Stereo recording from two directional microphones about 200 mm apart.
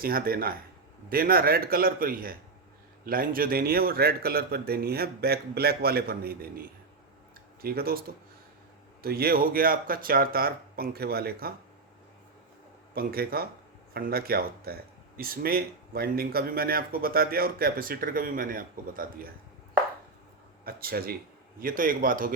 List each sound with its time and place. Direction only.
0.0 s speech: 45° right (ahead or behind)
12.9 s speech: 50° right (ahead or behind)
20.7 s speech: 50° right (ahead or behind)